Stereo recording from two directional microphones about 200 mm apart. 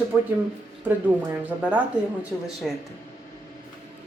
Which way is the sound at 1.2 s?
10° right (ahead or behind).